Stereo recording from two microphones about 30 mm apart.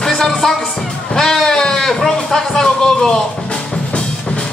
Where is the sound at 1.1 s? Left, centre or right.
Centre.